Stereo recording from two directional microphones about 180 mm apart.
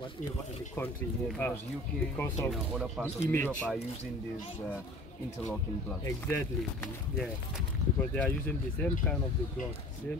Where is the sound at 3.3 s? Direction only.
10° left (ahead or behind).